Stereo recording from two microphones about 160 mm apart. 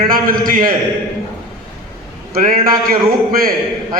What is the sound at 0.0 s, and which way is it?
Speech, 65° right (ahead or behind).